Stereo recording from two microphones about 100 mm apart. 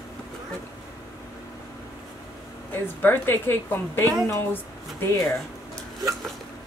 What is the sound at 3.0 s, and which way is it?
Speech, 20° left (ahead or behind).